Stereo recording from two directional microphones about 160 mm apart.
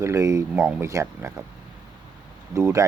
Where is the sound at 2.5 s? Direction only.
15° right (ahead or behind).